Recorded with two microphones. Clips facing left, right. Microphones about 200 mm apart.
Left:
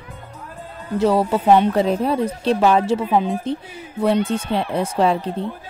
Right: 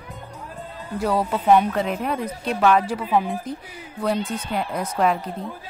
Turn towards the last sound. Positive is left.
turn(degrees=30)  # may be behind; listen again after turning